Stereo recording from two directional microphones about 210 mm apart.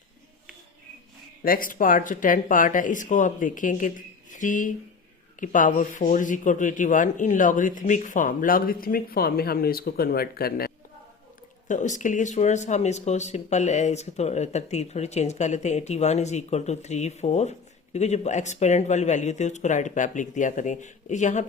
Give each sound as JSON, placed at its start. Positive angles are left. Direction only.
{"t": 1.4, "sound": "speech", "side_deg": 40}
{"t": 11.7, "sound": "speech", "side_deg": 35}